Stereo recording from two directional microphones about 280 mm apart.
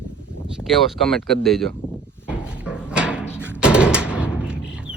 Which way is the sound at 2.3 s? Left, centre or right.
Centre.